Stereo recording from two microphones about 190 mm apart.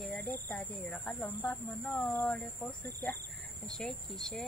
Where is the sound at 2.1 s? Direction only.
15° left (ahead or behind).